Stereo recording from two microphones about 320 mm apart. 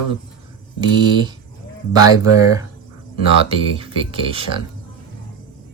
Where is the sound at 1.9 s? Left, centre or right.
Centre.